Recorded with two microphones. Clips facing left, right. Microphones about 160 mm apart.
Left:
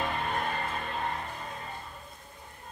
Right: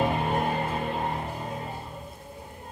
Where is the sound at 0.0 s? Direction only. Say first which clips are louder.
Right 6 dB; 15° right (ahead or behind).